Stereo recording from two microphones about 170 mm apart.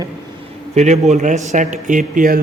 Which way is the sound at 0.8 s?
40° right (ahead or behind).